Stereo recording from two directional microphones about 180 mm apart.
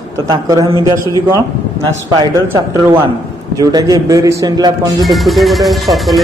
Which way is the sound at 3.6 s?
20° right (ahead or behind).